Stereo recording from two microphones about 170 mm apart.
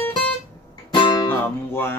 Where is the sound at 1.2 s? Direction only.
15° left (ahead or behind).